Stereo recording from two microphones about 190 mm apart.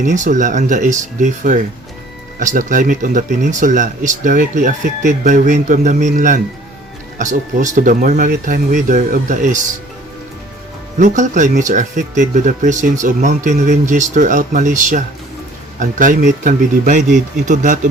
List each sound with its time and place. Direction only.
0.0 s speech: 40° right (ahead or behind)
11.0 s speech: 40° right (ahead or behind)